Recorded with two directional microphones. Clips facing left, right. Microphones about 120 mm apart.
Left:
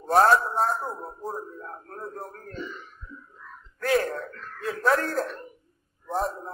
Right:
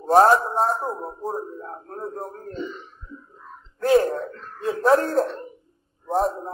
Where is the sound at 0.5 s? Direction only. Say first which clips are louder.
Right 3 dB; 30° right (ahead or behind).